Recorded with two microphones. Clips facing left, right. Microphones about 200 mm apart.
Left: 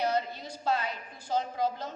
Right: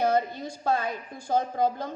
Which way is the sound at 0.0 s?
50° right (ahead or behind).